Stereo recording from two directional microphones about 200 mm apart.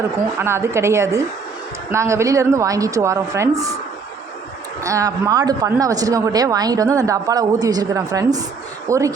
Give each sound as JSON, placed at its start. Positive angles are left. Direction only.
{"t": 0.3, "sound": "speech", "side_deg": -10}
{"t": 4.8, "sound": "speech", "side_deg": -15}